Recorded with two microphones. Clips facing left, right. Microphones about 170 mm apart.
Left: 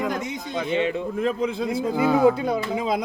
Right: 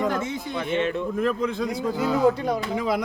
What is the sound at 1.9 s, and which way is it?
Speech, 55° left (ahead or behind).